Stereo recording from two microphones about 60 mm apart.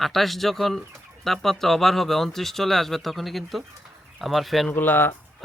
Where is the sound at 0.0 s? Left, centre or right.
Centre.